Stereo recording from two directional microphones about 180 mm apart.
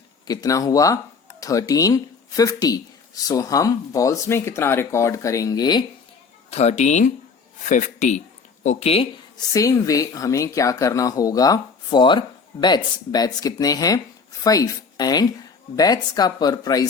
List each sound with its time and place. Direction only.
0.3 s speech: 20° left (ahead or behind)
6.5 s speech: 40° left (ahead or behind)
9.5 s speech: 20° left (ahead or behind)